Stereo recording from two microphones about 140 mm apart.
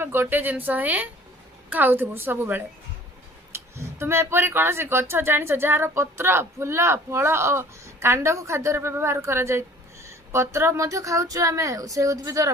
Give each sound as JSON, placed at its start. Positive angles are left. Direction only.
{"t": 0.0, "sound": "a woman's voice", "side_deg": -15}